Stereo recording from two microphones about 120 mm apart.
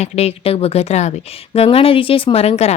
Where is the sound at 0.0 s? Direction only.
60° left (ahead or behind).